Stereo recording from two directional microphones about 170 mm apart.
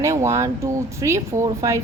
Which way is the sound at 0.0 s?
15° right (ahead or behind).